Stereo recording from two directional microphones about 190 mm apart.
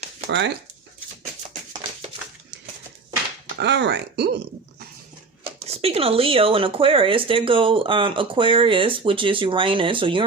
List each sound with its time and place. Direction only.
0.3 s speech: 70° right (ahead or behind)
3.6 s speech: 65° right (ahead or behind)
5.4 s speech: 30° right (ahead or behind)